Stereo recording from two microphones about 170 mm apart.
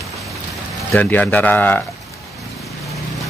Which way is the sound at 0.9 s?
10° left (ahead or behind).